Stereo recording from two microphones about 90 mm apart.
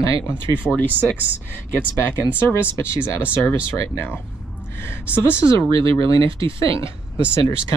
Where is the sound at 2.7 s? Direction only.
30° left (ahead or behind).